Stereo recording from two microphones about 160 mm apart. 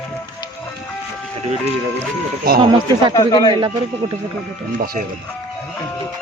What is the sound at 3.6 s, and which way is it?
Speech, 30° right (ahead or behind).